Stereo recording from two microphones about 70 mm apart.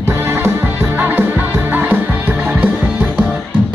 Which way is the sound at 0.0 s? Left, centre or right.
Right.